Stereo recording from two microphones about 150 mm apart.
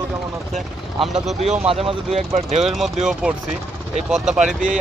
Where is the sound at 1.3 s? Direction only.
40° right (ahead or behind).